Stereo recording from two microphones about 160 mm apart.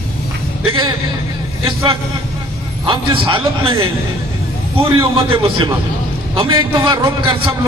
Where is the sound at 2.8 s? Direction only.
30° right (ahead or behind).